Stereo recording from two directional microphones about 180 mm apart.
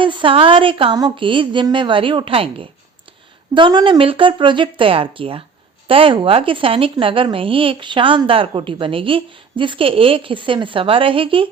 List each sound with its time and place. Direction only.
0.0 s speech: 30° right (ahead or behind)